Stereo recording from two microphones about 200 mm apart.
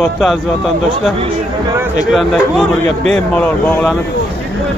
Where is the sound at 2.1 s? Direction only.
Centre (ahead or behind).